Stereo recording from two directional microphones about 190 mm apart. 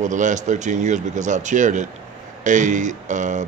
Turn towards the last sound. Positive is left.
turn(degrees=-40)  # may be behind; listen again after turning